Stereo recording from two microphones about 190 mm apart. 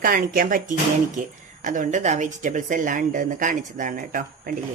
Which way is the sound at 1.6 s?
40° right (ahead or behind).